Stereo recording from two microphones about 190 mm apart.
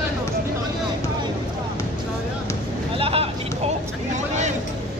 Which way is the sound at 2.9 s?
30° right (ahead or behind).